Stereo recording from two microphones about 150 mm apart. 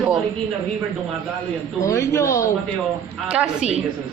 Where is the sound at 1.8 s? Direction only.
20° left (ahead or behind).